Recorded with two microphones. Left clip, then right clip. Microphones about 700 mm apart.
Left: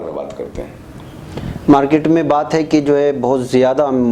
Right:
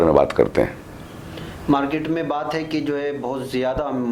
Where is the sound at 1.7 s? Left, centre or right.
Left.